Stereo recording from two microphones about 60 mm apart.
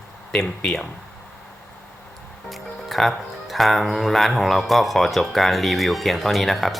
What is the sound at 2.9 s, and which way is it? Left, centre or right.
Speech, centre.